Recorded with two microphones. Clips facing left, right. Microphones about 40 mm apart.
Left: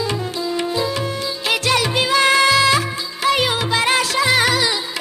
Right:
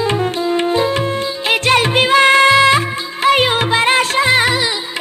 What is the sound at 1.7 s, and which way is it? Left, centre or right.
Music of bollywood, right.